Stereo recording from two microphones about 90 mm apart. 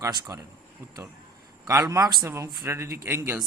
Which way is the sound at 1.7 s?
35° right (ahead or behind).